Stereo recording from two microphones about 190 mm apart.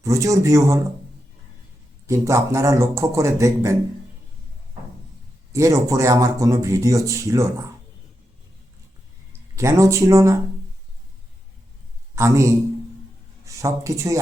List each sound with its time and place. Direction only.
0.0 s speech: 15° right (ahead or behind)
2.0 s speech: 15° right (ahead or behind)
5.5 s speech: 15° right (ahead or behind)
9.6 s speech: 15° right (ahead or behind)
12.1 s a man's voice: 15° right (ahead or behind)